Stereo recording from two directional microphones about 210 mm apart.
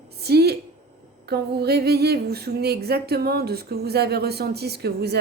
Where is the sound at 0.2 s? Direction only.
50° right (ahead or behind).